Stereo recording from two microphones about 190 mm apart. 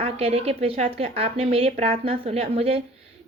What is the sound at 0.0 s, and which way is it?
A woman's voice, 35° right (ahead or behind).